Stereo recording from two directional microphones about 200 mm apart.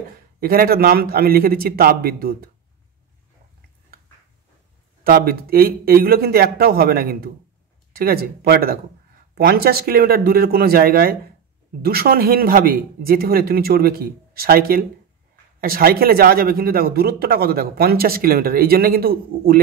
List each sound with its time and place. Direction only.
0.4 s a man's voice: 50° right (ahead or behind)
5.0 s a man's voice: 50° right (ahead or behind)